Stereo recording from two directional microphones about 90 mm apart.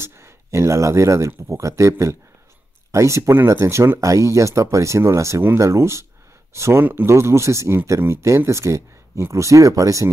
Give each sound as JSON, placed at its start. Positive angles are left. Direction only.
{"t": 0.0, "sound": "speech", "side_deg": -30}